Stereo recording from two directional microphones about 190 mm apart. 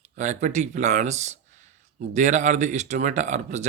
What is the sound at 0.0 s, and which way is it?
Speech, 40° right (ahead or behind).